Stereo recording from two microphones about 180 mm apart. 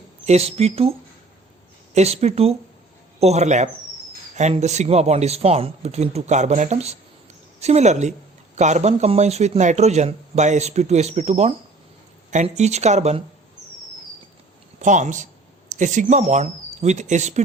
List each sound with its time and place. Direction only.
0.3 s a man's voice: 35° right (ahead or behind)
14.8 s speech: 45° right (ahead or behind)